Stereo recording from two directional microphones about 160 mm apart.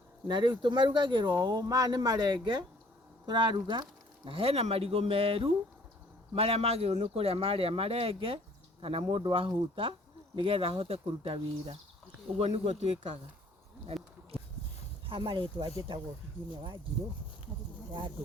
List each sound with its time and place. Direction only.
0.3 s a man's voice: 30° right (ahead or behind)
13.8 s a sound: 35° right (ahead or behind)
15.0 s speech: 30° right (ahead or behind)